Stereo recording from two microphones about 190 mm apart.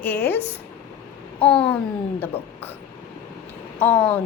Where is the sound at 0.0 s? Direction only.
10° left (ahead or behind).